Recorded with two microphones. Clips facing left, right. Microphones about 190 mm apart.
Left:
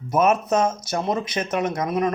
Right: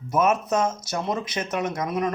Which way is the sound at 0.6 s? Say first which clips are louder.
Left 3 dB; 55° left (ahead or behind).